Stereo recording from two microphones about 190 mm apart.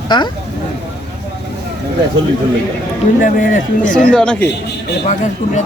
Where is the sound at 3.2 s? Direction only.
45° left (ahead or behind).